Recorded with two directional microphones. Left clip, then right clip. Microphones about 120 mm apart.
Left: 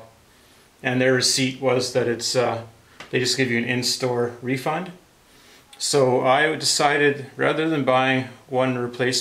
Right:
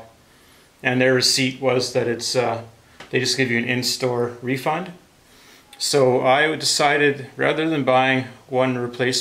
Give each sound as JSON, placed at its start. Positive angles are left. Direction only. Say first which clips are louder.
{"t": 0.7, "sound": "speech", "louder": "right 2 dB", "side_deg": -15}
{"t": 4.2, "sound": "speech", "louder": "right 1 dB", "side_deg": -15}